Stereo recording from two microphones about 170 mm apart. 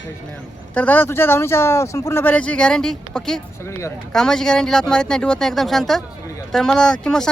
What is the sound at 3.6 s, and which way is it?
Speech, 15° left (ahead or behind).